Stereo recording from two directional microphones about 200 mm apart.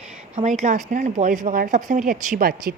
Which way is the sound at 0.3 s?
35° right (ahead or behind).